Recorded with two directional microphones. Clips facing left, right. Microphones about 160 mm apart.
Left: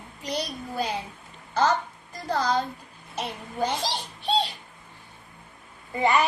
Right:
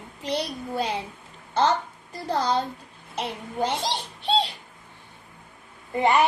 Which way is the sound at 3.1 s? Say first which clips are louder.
Right 2 dB; 25° right (ahead or behind).